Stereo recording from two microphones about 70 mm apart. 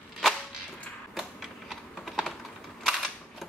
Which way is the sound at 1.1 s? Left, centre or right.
Centre.